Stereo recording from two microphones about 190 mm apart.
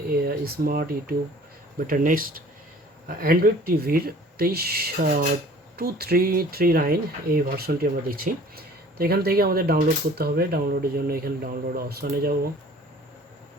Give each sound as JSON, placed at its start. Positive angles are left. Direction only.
{"t": 0.2, "sound": "speech", "side_deg": -50}